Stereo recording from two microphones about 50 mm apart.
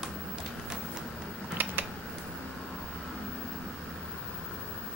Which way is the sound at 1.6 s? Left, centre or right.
Right.